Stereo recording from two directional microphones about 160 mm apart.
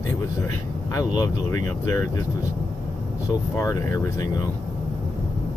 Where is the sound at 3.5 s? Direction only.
20° left (ahead or behind).